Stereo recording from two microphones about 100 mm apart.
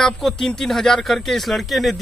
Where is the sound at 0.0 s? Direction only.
5° left (ahead or behind).